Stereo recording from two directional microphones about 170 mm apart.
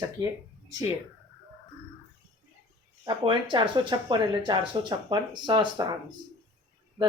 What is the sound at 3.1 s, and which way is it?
Speech, 30° right (ahead or behind).